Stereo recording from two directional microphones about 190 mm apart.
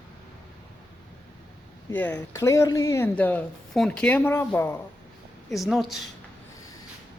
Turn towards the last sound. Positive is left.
turn(degrees=0)  # may be behind; listen again after turning